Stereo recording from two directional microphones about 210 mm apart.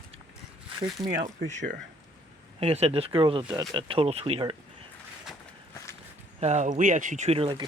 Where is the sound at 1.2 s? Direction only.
35° right (ahead or behind).